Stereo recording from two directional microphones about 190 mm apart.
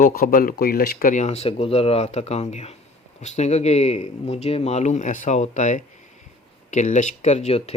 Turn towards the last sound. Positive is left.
turn(degrees=35)  # may be behind; listen again after turning